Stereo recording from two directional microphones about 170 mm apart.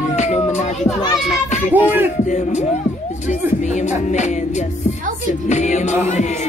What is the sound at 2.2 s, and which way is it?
Speech, 45° left (ahead or behind).